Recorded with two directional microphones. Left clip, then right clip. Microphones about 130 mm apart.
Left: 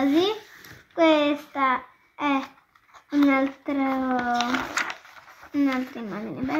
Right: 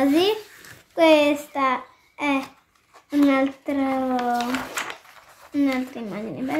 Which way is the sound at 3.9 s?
25° right (ahead or behind).